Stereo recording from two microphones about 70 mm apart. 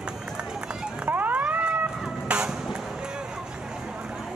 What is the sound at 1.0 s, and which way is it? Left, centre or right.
Vehicle, right.